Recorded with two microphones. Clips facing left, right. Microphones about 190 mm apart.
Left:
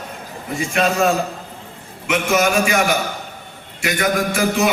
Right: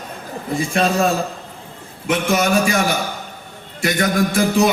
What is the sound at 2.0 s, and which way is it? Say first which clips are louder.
A man's voice: even; 35° right (ahead or behind).